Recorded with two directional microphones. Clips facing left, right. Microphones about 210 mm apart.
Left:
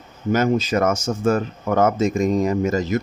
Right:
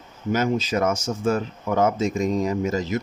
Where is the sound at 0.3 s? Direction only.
50° left (ahead or behind).